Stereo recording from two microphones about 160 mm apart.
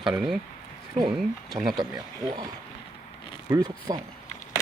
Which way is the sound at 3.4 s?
25° right (ahead or behind).